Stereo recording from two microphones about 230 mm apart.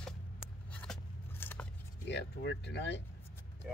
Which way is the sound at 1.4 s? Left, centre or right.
Centre.